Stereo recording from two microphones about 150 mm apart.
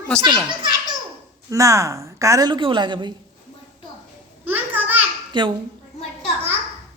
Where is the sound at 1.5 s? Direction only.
20° right (ahead or behind).